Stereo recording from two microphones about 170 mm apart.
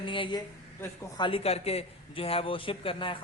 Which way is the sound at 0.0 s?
30° left (ahead or behind).